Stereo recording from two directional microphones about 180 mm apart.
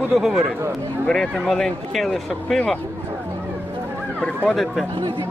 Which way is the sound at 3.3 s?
10° right (ahead or behind).